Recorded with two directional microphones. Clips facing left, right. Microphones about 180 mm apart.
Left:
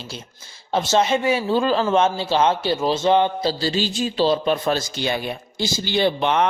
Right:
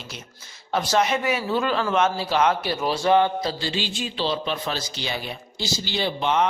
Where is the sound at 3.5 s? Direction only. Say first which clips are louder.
Left 5 dB; 35° left (ahead or behind); by 6.4 s 60° left (ahead or behind).